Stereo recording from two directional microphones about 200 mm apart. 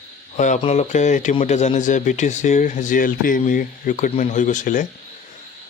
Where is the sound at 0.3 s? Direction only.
35° left (ahead or behind).